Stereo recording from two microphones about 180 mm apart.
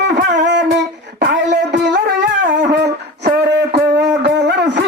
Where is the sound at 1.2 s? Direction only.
75° right (ahead or behind).